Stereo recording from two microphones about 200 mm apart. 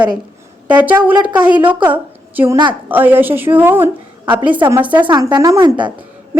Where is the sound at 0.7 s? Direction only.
10° right (ahead or behind).